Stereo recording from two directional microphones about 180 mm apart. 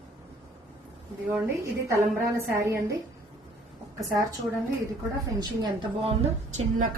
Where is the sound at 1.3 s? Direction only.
10° right (ahead or behind).